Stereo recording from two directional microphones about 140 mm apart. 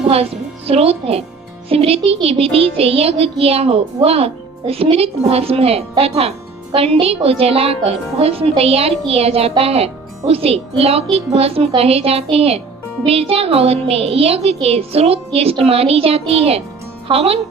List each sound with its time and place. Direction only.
0.7 s a woman's voice: 45° right (ahead or behind)